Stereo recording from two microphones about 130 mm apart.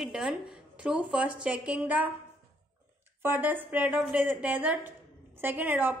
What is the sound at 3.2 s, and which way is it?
A woman's voice, 15° right (ahead or behind).